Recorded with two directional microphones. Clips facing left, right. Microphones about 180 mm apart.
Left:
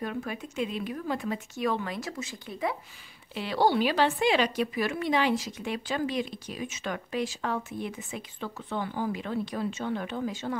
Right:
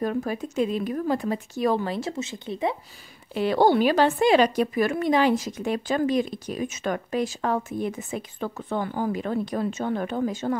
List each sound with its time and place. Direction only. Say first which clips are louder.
0.0 s speech: right 7 dB; 40° right (ahead or behind); by 2.8 s 25° right (ahead or behind)
3.3 s speech: right 6 dB; 50° right (ahead or behind)